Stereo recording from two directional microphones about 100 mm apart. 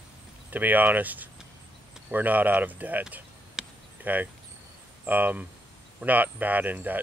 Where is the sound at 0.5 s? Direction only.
15° right (ahead or behind).